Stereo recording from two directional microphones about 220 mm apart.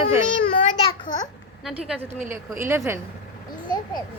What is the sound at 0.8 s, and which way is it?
Speech, 25° left (ahead or behind).